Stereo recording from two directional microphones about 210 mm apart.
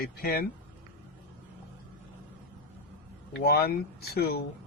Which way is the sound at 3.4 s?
50° left (ahead or behind).